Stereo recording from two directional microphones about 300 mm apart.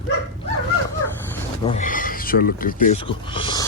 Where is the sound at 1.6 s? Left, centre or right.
Left.